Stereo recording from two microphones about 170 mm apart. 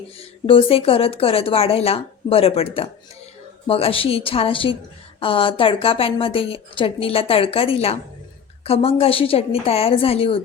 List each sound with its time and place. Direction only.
0.2 s a woman's voice: 35° left (ahead or behind)